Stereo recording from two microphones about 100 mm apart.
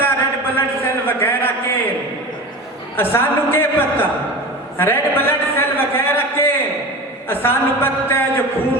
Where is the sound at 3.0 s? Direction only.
20° left (ahead or behind).